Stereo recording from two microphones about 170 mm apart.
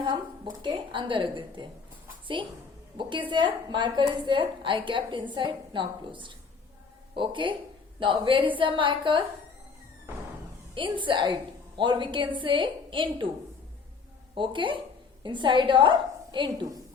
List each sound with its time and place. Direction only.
0.6 s a woman's voice: 30° right (ahead or behind)
10.8 s a woman's voice: 30° right (ahead or behind)
14.3 s a woman's voice: 30° right (ahead or behind)